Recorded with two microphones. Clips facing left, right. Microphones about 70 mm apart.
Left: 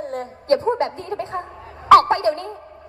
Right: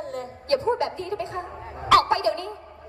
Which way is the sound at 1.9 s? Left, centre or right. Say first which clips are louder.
Left 6 dB; left.